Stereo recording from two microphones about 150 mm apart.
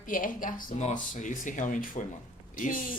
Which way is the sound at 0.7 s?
50° left (ahead or behind).